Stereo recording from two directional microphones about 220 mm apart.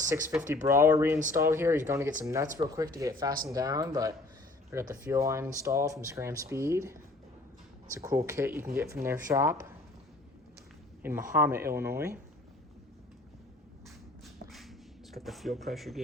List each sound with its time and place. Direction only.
0.3 s speech: 10° right (ahead or behind)
11.0 s a man's voice: 10° right (ahead or behind)
14.5 s a sound: centre (ahead or behind)